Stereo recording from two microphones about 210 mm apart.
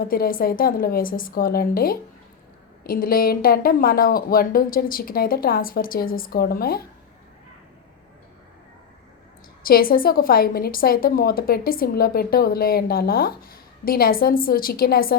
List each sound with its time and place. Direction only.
0.0 s a woman's voice: 45° left (ahead or behind)
9.6 s a woman's voice: 45° left (ahead or behind)